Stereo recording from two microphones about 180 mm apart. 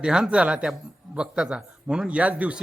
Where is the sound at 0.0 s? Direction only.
5° right (ahead or behind).